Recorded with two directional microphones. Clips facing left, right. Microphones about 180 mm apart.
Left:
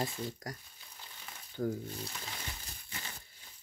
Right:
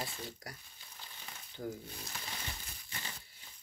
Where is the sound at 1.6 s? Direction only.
60° left (ahead or behind).